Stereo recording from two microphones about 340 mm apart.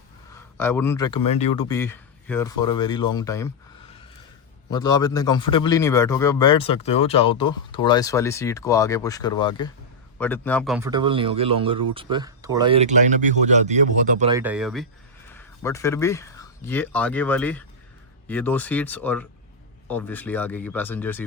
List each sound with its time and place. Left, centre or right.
0.3 s a man's voice: centre
4.7 s a man's voice: centre
14.3 s speech: centre